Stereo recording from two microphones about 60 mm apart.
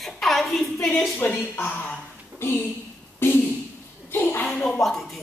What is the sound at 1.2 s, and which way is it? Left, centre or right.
Speech, left.